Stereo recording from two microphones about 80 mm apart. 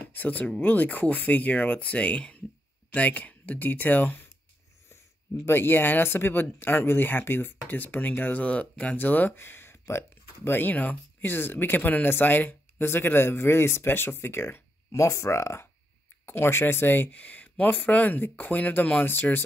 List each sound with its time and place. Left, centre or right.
0.1 s speech: left
5.4 s speech: left